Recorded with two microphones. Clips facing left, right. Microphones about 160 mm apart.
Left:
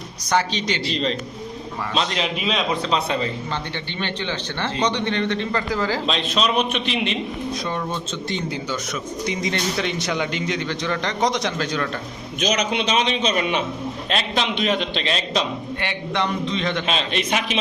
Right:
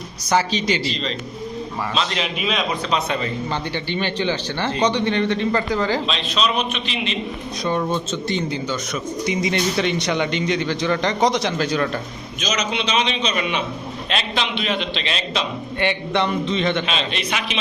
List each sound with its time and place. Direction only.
0.3 s a man's voice: 5° right (ahead or behind)
0.9 s a man's voice: 55° left (ahead or behind)
2.5 s a man's voice: 30° left (ahead or behind)
4.0 s speech: 5° right (ahead or behind)
6.1 s a man's voice: 50° left (ahead or behind)
8.3 s a man's voice: centre (ahead or behind)
12.4 s a man's voice: 60° left (ahead or behind); by 15.4 s 40° left (ahead or behind)
15.8 s a man's voice: centre (ahead or behind)
16.8 s a man's voice: 45° left (ahead or behind)